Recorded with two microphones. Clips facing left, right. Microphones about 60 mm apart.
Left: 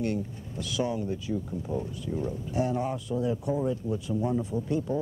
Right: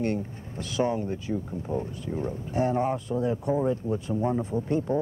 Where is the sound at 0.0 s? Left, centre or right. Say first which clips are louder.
Right 2 dB; right.